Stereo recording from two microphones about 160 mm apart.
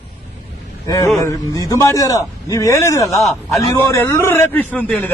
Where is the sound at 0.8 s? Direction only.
20° left (ahead or behind).